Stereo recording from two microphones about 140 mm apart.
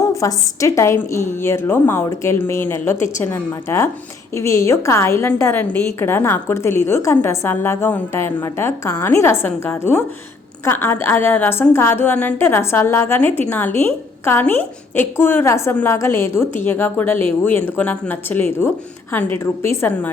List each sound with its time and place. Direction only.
0.0 s a woman's voice: 25° left (ahead or behind)